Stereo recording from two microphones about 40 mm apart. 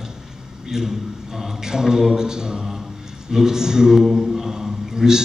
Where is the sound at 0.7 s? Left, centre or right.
Centre.